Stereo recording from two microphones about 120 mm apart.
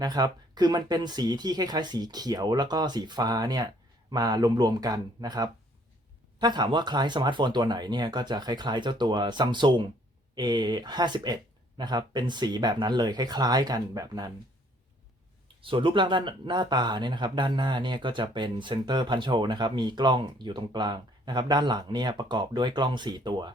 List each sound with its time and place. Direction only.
0.0 s speech: 35° right (ahead or behind)
15.6 s speech: 45° right (ahead or behind)